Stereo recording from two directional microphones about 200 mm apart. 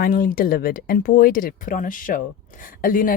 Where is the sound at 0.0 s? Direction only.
45° left (ahead or behind).